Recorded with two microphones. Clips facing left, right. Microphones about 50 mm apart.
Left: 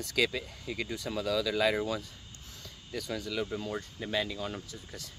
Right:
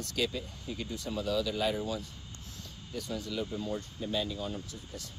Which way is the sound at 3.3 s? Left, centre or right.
Left.